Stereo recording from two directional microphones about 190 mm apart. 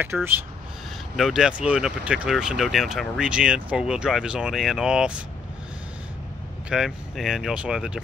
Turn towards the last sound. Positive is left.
turn(degrees=-5)  # may be behind; listen again after turning